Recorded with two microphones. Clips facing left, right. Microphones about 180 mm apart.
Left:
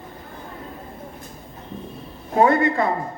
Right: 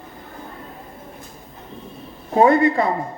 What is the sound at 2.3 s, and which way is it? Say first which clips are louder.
Speech: right 3 dB; 25° right (ahead or behind).